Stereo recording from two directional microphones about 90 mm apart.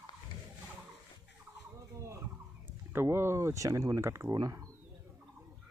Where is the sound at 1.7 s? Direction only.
35° right (ahead or behind).